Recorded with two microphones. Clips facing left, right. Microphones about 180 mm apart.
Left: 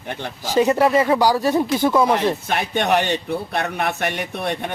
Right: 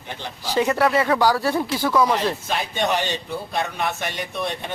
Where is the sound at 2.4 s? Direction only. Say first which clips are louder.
Left 3 dB; 60° left (ahead or behind).